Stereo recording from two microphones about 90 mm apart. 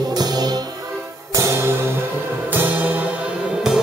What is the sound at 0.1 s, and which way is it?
Music, 50° right (ahead or behind).